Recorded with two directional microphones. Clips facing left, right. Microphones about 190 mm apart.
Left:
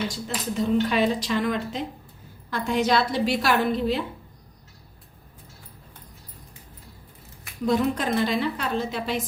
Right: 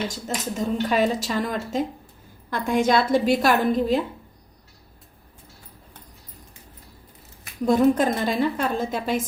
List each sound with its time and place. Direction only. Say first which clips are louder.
0.3 s speech: left 2 dB; 45° right (ahead or behind)
7.7 s speech: right 5 dB; 45° right (ahead or behind)